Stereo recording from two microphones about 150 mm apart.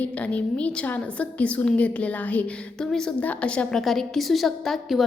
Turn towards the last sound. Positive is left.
turn(degrees=0)  # may be behind; listen again after turning